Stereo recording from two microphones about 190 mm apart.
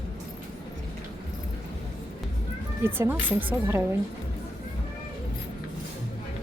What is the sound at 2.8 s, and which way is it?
A woman's voice, 10° right (ahead or behind).